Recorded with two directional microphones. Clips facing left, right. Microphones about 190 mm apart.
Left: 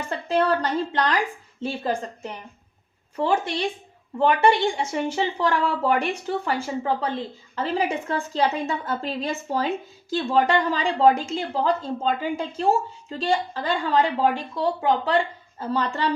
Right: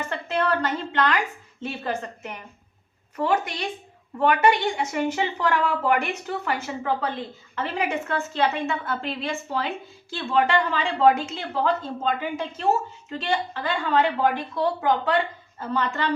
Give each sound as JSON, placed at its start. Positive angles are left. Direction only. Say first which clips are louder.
{"t": 0.3, "sound": "a woman's voice", "louder": "left 3 dB", "side_deg": 35}